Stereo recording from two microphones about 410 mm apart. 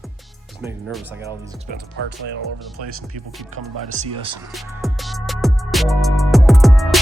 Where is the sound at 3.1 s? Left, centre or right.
Right.